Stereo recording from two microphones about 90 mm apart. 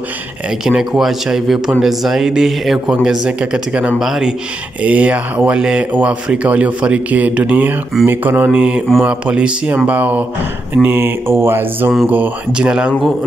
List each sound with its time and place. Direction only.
0.7 s a man's voice: 5° right (ahead or behind)